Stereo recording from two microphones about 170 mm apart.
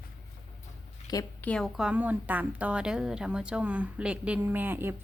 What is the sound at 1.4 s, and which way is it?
A woman's voice, 5° left (ahead or behind).